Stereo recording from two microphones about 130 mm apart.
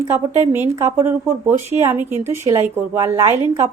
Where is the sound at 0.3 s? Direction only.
20° right (ahead or behind).